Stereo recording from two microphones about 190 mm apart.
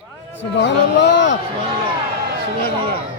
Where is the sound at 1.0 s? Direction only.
70° left (ahead or behind).